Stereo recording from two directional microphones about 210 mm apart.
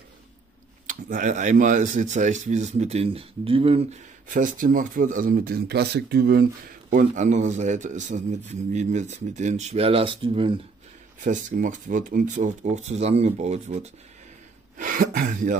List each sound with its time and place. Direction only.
0.8 s a man's voice: 40° right (ahead or behind)
4.3 s speech: 40° right (ahead or behind)
6.9 s a man's voice: 40° right (ahead or behind)
11.1 s a man's voice: 40° right (ahead or behind)
14.8 s throat clearing: 40° right (ahead or behind)